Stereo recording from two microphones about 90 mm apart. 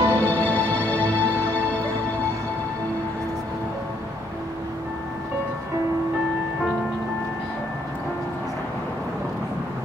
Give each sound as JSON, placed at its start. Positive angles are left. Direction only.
{"t": 0.0, "sound": "music", "side_deg": 20}